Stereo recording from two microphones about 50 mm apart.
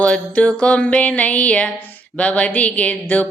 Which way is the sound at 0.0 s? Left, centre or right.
Left.